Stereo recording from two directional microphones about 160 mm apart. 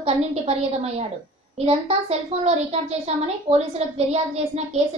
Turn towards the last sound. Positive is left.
turn(degrees=-40)  # may be behind; listen again after turning